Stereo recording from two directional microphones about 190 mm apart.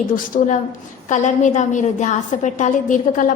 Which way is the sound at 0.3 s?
45° left (ahead or behind).